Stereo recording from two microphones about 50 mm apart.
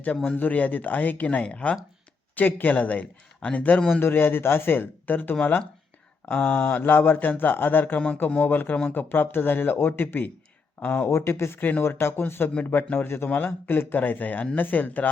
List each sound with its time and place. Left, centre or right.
0.3 s speech: left
2.3 s speech: left
4.0 s speech: left
6.3 s speech: left
6.8 s speech: left
7.9 s speech: left
8.4 s speech: left
11.1 s speech: left